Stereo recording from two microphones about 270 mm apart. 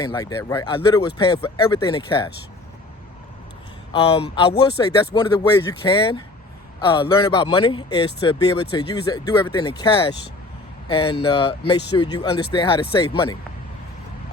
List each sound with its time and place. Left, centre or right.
0.0 s speech: centre
3.9 s speech: left